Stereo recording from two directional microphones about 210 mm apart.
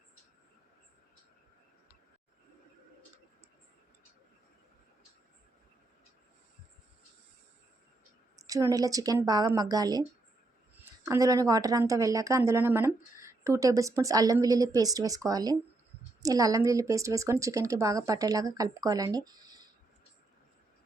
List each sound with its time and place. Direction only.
8.4 s speech: 15° right (ahead or behind)
11.0 s speech: 15° right (ahead or behind)